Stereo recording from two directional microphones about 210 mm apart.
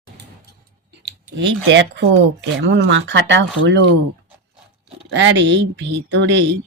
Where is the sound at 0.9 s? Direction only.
55° right (ahead or behind).